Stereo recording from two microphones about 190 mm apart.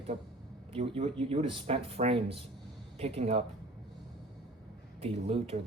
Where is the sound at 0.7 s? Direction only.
30° right (ahead or behind).